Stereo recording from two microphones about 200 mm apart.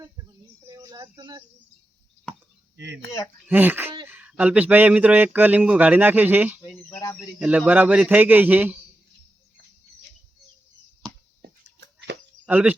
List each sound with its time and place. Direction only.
0.7 s a sound: 15° right (ahead or behind)
2.7 s speech: 60° right (ahead or behind)
3.4 s speech: 10° right (ahead or behind)
6.9 s speech: 15° left (ahead or behind)
7.3 s speech: 5° right (ahead or behind)
12.1 s a sound: 60° right (ahead or behind)
12.5 s speech: 10° right (ahead or behind)